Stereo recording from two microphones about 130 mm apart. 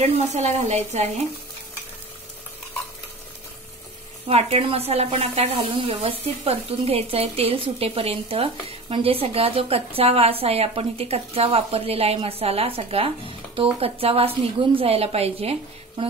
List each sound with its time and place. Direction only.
0.1 s a woman's voice: 60° right (ahead or behind)
4.3 s speech: 55° right (ahead or behind)